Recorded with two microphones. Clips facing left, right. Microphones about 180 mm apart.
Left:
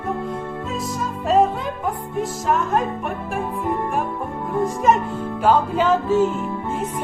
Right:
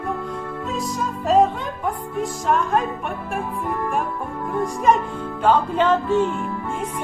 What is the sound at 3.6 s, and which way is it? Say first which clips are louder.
Music: left 3 dB; 20° left (ahead or behind).